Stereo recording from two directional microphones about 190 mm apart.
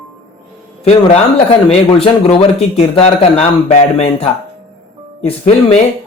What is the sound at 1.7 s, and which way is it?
Speech, 30° left (ahead or behind).